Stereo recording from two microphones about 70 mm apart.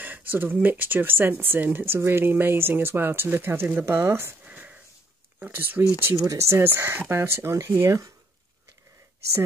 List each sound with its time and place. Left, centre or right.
0.0 s speech: right
4.5 s wheeze: centre
5.4 s speech: right
6.1 s speech: right